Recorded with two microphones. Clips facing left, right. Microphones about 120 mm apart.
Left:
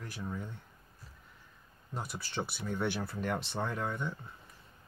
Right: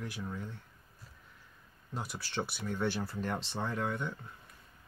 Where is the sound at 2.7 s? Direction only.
15° left (ahead or behind).